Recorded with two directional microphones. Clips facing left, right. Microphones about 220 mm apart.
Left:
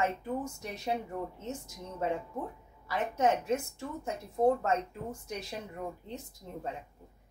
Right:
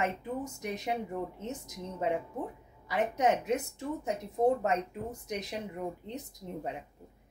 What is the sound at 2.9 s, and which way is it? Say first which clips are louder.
A woman's voice: right 1 dB; 15° right (ahead or behind).